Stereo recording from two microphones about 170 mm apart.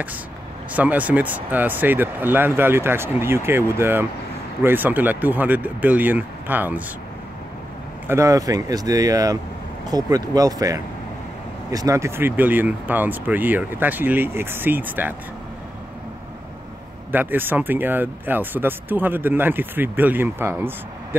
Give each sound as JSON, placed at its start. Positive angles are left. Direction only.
{"t": 0.7, "sound": "speech", "side_deg": -10}
{"t": 8.1, "sound": "speech", "side_deg": -20}
{"t": 17.1, "sound": "speech", "side_deg": -10}